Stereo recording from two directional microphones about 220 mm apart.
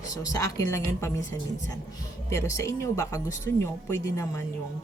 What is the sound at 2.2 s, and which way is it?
Speech, 15° left (ahead or behind).